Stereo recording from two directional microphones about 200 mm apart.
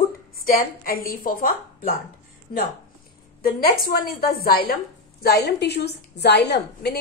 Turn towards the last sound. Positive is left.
turn(degrees=55)  # may be behind; listen again after turning